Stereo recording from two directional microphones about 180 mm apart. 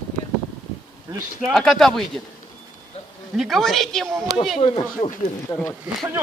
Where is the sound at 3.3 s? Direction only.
Centre (ahead or behind).